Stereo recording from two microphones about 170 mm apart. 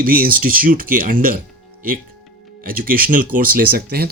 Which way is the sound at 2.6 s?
60° right (ahead or behind).